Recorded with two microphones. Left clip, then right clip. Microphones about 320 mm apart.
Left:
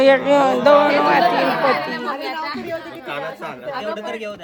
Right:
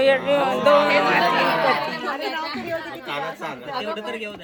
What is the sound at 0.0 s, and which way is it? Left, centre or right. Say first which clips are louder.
Speech: left 5 dB; left.